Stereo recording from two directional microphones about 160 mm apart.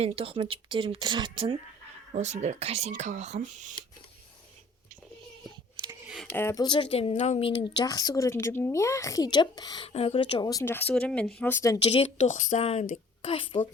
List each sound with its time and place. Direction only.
0.0 s speech: 35° right (ahead or behind)
2.1 s speech: 45° right (ahead or behind)
6.3 s speech: 15° left (ahead or behind)
6.7 s a woman's voice: 30° left (ahead or behind)
9.9 s speech: 40° left (ahead or behind); by 11.8 s 15° left (ahead or behind)
11.8 s a woman's voice: 40° left (ahead or behind)